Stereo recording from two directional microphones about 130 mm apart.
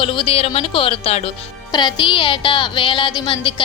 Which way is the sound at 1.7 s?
35° left (ahead or behind).